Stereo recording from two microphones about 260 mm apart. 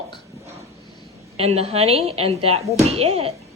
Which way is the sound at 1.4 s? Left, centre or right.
Right.